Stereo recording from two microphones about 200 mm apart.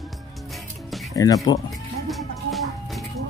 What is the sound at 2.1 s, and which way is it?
Music, centre (ahead or behind).